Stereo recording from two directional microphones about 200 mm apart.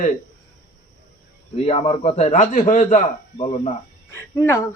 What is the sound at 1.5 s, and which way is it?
Speech, 30° left (ahead or behind).